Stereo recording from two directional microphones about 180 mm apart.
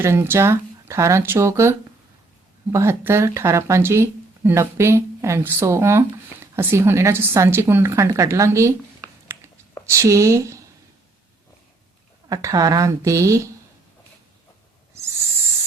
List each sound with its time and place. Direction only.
0.0 s speech: 15° right (ahead or behind)
2.7 s speech: 15° right (ahead or behind)
9.2 s a sound: 15° right (ahead or behind)
9.8 s speech: 15° right (ahead or behind)
12.3 s speech: 20° right (ahead or behind)